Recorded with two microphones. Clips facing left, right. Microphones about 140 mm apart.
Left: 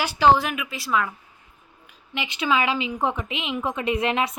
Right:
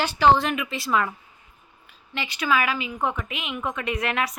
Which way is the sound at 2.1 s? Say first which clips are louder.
Left 1 dB; 20° left (ahead or behind).